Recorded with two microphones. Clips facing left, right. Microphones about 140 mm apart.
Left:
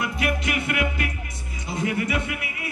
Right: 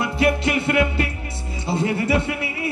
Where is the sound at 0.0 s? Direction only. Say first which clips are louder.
Right 6 dB; 30° right (ahead or behind).